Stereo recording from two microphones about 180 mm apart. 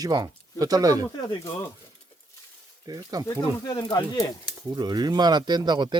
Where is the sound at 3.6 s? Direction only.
25° left (ahead or behind).